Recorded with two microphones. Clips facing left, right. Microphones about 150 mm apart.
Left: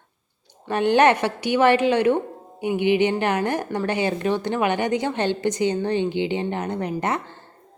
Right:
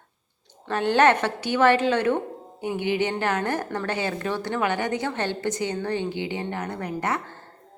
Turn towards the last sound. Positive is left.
turn(degrees=20)  # may be behind; listen again after turning